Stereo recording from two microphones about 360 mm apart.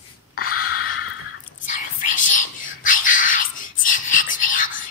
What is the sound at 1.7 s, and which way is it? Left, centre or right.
Whispering, left.